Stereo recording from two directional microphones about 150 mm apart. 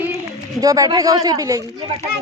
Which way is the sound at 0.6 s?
25° right (ahead or behind).